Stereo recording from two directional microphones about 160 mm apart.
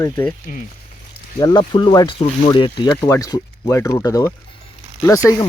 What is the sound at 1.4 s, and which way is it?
Speech, 25° left (ahead or behind).